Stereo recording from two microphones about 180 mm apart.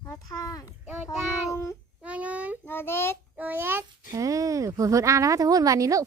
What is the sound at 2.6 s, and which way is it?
Child singing, 10° left (ahead or behind).